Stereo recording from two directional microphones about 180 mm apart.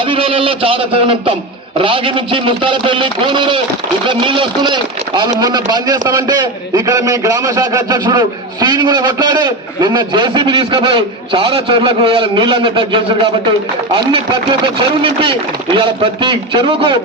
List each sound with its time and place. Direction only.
0.1 s a man's voice: 30° right (ahead or behind)